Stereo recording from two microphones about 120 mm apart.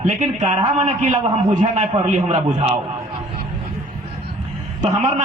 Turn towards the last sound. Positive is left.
turn(degrees=-90)